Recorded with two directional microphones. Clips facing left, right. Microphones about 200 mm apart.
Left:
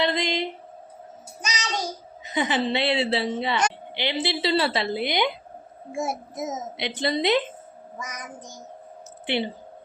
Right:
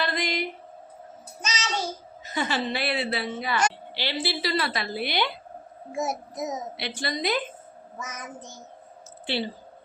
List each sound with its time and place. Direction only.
0.0 s a sound: 25° left (ahead or behind)
1.4 s a child's voice: 15° left (ahead or behind)
7.9 s child singing: 15° left (ahead or behind)
9.2 s speech: 20° left (ahead or behind)